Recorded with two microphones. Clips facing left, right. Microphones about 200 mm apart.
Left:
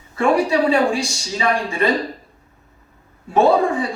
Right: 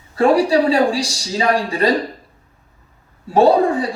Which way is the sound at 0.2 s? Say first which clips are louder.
Right 3 dB; 35° right (ahead or behind).